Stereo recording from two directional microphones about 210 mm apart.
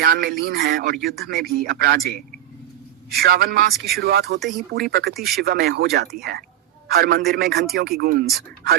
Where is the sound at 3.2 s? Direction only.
45° right (ahead or behind).